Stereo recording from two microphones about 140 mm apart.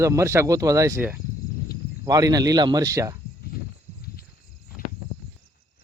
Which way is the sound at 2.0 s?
25° right (ahead or behind).